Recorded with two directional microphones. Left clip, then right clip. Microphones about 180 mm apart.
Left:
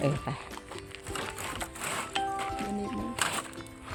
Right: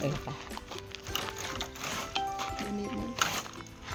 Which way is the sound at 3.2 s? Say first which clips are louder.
Right 1 dB; 45° left (ahead or behind).